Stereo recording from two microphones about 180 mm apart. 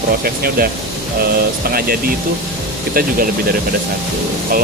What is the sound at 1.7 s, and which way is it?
Speech, 55° right (ahead or behind).